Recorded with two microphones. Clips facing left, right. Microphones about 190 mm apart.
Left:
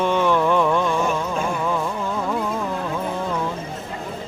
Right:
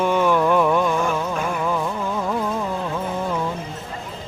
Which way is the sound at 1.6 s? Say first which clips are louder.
Even; 5° right (ahead or behind).